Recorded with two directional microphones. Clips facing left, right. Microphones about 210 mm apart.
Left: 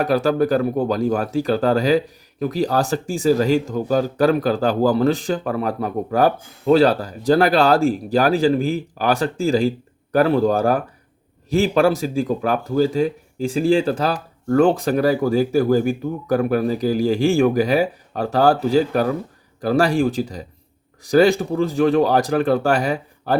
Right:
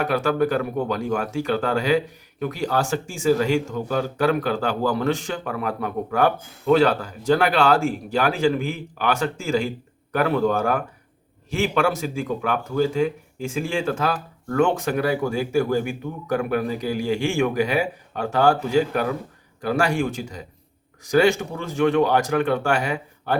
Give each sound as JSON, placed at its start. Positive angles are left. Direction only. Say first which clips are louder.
{"t": 0.0, "sound": "speech", "louder": "left 3 dB", "side_deg": 35}